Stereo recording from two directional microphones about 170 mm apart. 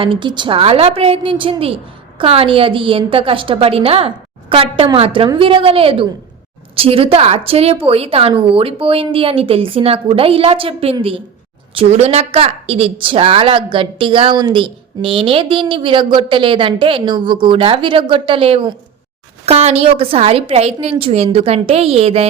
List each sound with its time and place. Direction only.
0.0 s a woman's voice: 30° right (ahead or behind)